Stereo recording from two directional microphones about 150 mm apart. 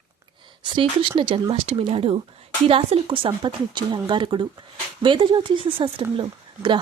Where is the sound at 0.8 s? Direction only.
35° right (ahead or behind).